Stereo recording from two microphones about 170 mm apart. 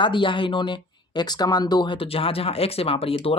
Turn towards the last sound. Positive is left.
turn(degrees=35)  # may be behind; listen again after turning